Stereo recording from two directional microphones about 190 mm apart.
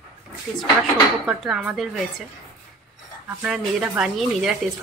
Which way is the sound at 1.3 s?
5° right (ahead or behind).